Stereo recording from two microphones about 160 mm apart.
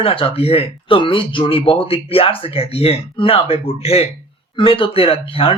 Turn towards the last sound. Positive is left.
turn(degrees=35)  # may be behind; listen again after turning